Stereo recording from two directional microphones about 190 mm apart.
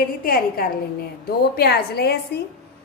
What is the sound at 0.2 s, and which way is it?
A woman's voice, 50° left (ahead or behind).